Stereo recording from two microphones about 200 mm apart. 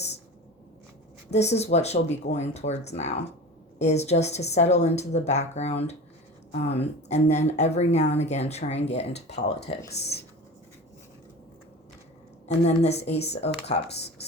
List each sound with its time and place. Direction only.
1.3 s speech: 35° left (ahead or behind)
9.9 s speech: 55° left (ahead or behind)
12.5 s speech: 35° left (ahead or behind)